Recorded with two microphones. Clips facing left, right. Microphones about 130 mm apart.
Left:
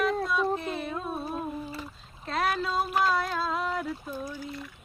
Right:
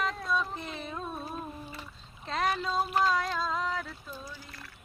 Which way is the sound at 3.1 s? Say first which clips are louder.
Left 2 dB; 5° left (ahead or behind).